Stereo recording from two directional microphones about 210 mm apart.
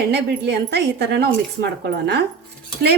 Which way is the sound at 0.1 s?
50° right (ahead or behind).